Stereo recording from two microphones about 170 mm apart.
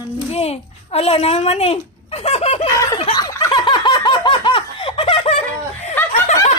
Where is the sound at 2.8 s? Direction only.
25° left (ahead or behind).